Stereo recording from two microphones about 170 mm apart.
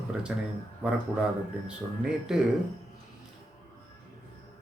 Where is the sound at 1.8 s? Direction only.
10° right (ahead or behind).